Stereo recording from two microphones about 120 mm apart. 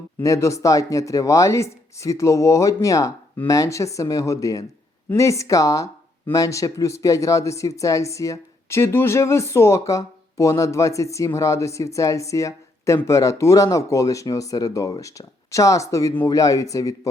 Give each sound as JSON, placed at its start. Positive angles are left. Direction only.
{"t": 0.2, "sound": "speech", "side_deg": 25}